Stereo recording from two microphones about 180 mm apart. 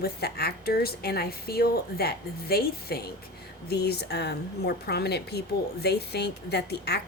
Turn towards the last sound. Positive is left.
turn(degrees=65)  # may be behind; listen again after turning